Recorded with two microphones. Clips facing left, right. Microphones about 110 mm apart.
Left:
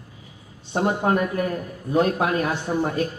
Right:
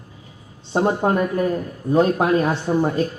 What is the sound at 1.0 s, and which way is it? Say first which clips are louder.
A man's voice: right 2 dB; 20° right (ahead or behind).